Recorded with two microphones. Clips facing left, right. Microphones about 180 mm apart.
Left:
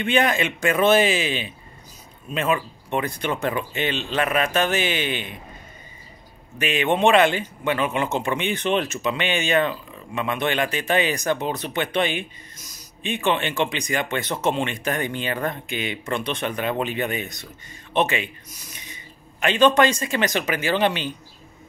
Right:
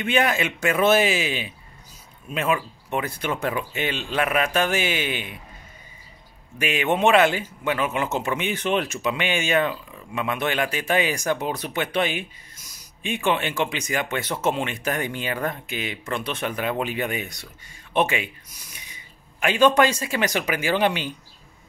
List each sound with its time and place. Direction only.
0.0 s a man's voice: 5° right (ahead or behind)
6.6 s a man's voice: 10° right (ahead or behind)